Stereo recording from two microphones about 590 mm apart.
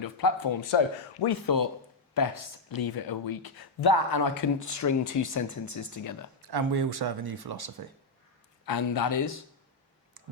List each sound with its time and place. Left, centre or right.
0.0 s speech: left
6.5 s speech: right
8.6 s speech: left